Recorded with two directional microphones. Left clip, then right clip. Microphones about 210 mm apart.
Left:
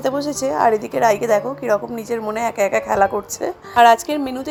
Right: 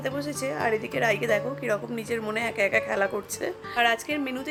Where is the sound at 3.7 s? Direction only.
25° left (ahead or behind).